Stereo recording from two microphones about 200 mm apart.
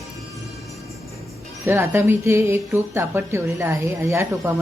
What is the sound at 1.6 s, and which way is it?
Speech, 10° right (ahead or behind).